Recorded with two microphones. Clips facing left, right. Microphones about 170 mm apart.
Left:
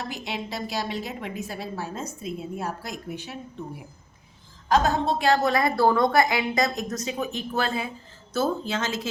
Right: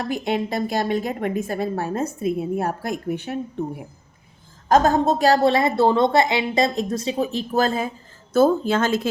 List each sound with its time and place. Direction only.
0.0 s a woman's voice: 50° right (ahead or behind)
4.7 s a woman's voice: 45° right (ahead or behind)
8.3 s a woman's voice: 50° right (ahead or behind)